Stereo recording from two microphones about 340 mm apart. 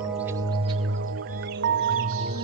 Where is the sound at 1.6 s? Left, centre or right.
Right.